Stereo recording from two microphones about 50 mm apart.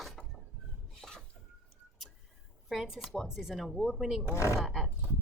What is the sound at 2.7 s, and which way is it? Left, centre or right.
A woman's voice, centre.